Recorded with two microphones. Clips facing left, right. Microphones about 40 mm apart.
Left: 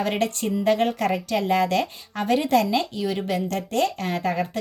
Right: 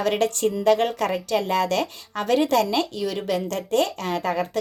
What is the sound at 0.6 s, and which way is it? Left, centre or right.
Speech, right.